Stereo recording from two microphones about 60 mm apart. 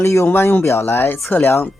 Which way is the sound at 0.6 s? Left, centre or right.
Left.